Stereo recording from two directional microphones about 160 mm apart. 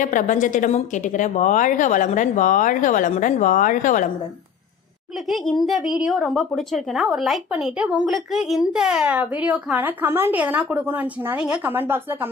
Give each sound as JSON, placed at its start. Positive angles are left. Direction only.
{"t": 0.0, "sound": "a woman's voice", "side_deg": 55}
{"t": 5.3, "sound": "a woman's voice", "side_deg": 0}